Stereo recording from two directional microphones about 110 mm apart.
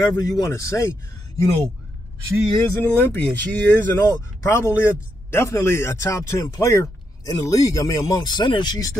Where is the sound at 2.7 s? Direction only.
20° left (ahead or behind); by 8.8 s 45° left (ahead or behind).